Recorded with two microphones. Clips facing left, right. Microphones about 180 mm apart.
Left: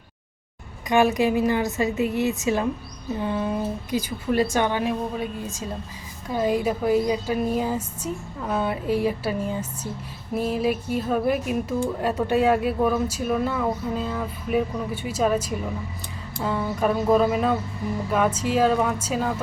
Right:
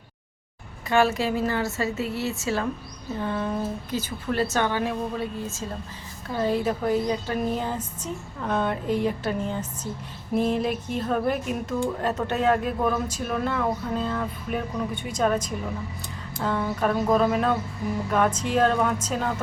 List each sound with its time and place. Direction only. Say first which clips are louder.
0.9 s speech: left 3 dB; 15° left (ahead or behind)